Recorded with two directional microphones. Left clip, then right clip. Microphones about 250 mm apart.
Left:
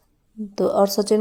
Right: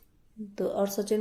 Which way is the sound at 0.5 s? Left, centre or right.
Left.